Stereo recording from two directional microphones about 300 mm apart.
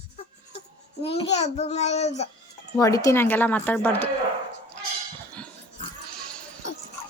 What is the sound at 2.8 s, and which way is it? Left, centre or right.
Speech, centre.